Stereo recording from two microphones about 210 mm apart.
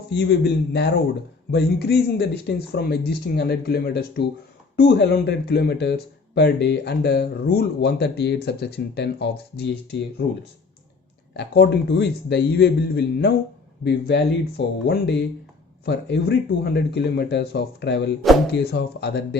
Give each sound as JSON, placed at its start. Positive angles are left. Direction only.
{"t": 0.1, "sound": "speech", "side_deg": 55}
{"t": 11.3, "sound": "speech", "side_deg": 50}